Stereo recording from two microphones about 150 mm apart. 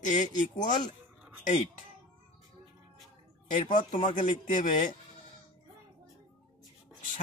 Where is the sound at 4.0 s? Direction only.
30° left (ahead or behind).